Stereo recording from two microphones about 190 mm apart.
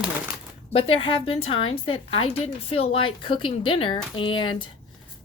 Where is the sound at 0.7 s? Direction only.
30° left (ahead or behind).